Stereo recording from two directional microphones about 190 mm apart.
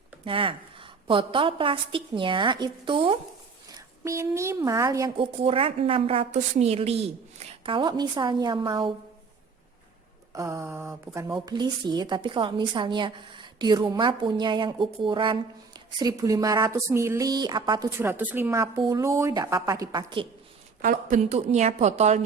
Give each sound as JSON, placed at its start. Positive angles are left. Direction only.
{"t": 0.3, "sound": "a woman's voice", "side_deg": -30}
{"t": 3.8, "sound": "a woman's voice", "side_deg": -15}
{"t": 10.3, "sound": "a woman's voice", "side_deg": -15}
{"t": 20.8, "sound": "a woman's voice", "side_deg": -40}